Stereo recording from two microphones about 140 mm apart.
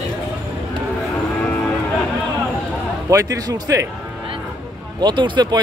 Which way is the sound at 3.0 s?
25° right (ahead or behind).